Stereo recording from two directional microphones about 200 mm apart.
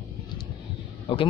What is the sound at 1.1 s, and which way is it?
Speech, 25° left (ahead or behind).